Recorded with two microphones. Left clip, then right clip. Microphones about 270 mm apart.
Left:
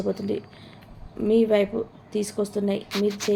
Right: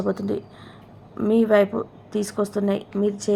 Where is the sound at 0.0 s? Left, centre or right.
Centre.